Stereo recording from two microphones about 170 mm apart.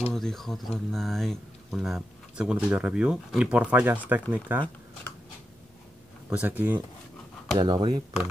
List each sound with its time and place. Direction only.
0.1 s speech: 5° left (ahead or behind)
6.3 s speech: 10° right (ahead or behind)
7.5 s speech: 25° right (ahead or behind)